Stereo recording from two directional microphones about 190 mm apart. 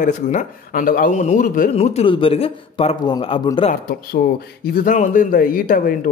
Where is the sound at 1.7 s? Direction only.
35° left (ahead or behind).